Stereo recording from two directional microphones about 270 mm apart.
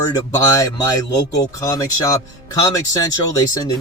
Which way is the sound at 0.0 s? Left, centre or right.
Centre.